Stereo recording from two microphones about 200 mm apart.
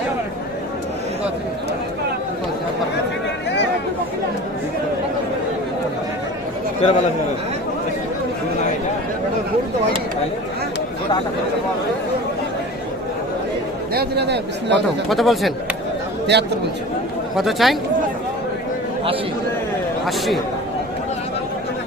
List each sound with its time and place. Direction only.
6.8 s speech: 30° left (ahead or behind)
13.9 s speech: 55° right (ahead or behind)
15.1 s speech: centre (ahead or behind)
16.3 s speech: 55° right (ahead or behind)
17.3 s speech: centre (ahead or behind)
20.1 s speech: centre (ahead or behind)